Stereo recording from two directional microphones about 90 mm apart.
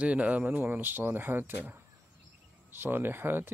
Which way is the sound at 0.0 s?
15° right (ahead or behind).